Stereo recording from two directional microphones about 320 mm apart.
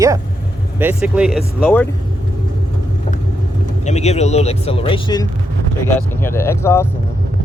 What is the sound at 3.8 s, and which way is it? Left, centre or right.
Speech, left.